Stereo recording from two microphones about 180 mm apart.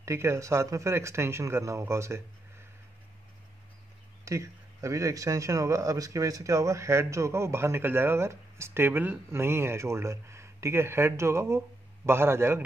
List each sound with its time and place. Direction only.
0.0 s speech: 15° right (ahead or behind)
4.2 s speech: 15° right (ahead or behind)